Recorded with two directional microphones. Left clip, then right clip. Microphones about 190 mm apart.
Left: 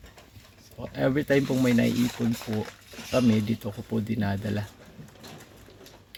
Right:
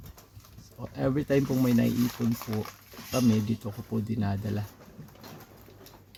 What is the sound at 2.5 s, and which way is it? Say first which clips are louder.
Speech: left 3 dB; 35° left (ahead or behind).